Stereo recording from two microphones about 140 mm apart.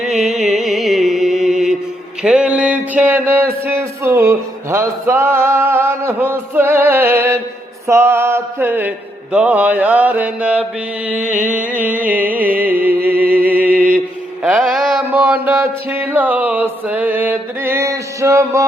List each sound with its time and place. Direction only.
0.0 s music: 5° right (ahead or behind)
2.2 s a sound: 5° right (ahead or behind)
7.9 s mantra: 20° right (ahead or behind)
11.1 s a sound: 65° right (ahead or behind)
11.8 s music: 10° right (ahead or behind)
13.0 s music: 90° right
13.3 s music: 10° right (ahead or behind)
14.4 s mantra: centre (ahead or behind)
15.4 s music: 15° right (ahead or behind)